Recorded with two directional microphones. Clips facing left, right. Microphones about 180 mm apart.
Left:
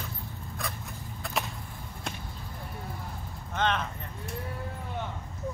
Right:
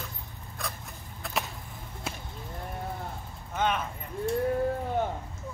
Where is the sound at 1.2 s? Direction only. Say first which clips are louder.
Even; centre (ahead or behind).